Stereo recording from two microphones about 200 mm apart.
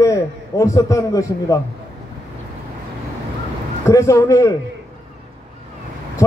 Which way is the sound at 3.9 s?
15° left (ahead or behind).